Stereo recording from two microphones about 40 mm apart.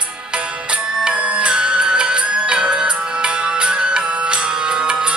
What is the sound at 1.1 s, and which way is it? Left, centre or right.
Music, right.